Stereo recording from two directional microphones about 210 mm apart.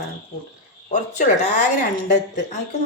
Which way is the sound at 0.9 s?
35° left (ahead or behind).